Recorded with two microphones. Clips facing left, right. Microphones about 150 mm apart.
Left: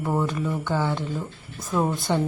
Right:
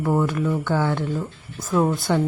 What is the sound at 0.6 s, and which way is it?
Speech, 15° left (ahead or behind).